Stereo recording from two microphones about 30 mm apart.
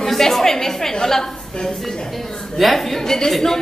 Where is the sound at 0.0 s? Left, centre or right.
Centre.